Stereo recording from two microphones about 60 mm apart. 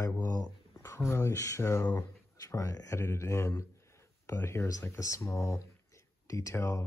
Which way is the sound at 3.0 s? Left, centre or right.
Left.